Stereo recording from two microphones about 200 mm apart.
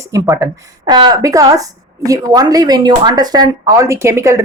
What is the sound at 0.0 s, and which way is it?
Speech, 15° right (ahead or behind).